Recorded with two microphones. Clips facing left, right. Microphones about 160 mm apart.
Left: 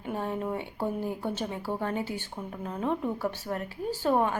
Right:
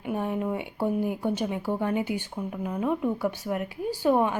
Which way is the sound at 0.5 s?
15° right (ahead or behind).